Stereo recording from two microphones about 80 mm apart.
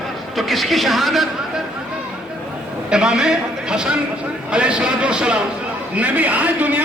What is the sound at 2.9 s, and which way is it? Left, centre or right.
A man's voice, centre.